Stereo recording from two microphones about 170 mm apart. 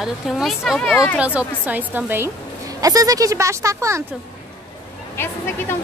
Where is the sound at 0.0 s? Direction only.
Centre (ahead or behind); by 4.0 s 15° right (ahead or behind).